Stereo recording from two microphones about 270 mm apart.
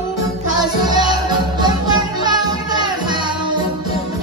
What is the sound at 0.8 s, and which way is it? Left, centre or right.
Music, centre.